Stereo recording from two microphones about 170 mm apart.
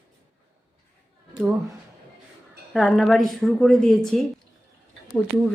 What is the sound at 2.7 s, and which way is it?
A woman's voice, centre (ahead or behind).